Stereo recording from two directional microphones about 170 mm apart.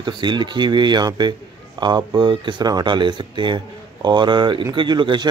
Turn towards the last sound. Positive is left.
turn(degrees=-25)  # may be behind; listen again after turning